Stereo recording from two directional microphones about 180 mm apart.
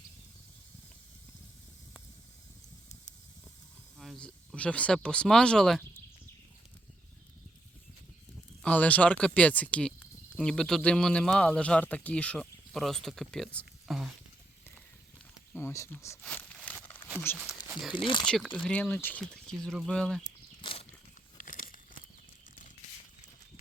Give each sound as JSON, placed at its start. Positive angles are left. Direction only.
{"t": 3.9, "sound": "speech", "side_deg": 0}
{"t": 8.6, "sound": "speech", "side_deg": 10}
{"t": 15.5, "sound": "speech", "side_deg": 15}
{"t": 16.2, "sound": "a sound", "side_deg": 5}
{"t": 17.3, "sound": "speech", "side_deg": 10}
{"t": 17.9, "sound": "speech", "side_deg": 25}
{"t": 18.3, "sound": "speech", "side_deg": 5}
{"t": 20.2, "sound": "a sound", "side_deg": 30}
{"t": 21.3, "sound": "crumpling", "side_deg": 50}